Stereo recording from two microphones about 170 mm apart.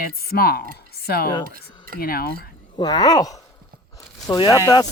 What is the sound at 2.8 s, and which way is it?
Speech, 25° left (ahead or behind).